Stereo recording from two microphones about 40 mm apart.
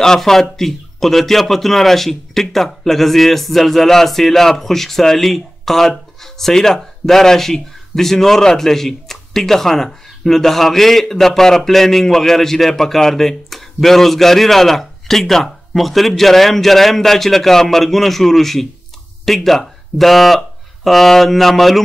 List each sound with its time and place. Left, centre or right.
0.2 s a man's voice: centre